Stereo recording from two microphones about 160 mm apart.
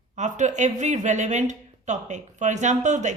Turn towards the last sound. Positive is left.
turn(degrees=-50)  # may be behind; listen again after turning